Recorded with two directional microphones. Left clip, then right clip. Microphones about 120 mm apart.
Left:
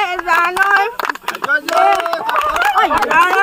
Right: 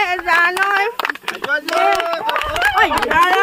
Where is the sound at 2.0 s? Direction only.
55° left (ahead or behind).